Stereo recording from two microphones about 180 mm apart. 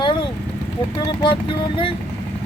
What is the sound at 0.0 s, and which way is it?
Vehicle, 25° left (ahead or behind).